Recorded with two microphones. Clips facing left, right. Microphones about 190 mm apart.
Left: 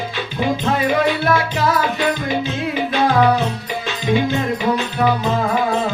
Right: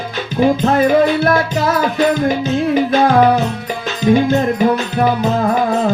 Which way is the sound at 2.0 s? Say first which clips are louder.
Right 6 dB; 45° right (ahead or behind).